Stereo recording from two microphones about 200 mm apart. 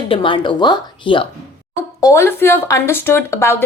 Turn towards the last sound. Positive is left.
turn(degrees=15)  # may be behind; listen again after turning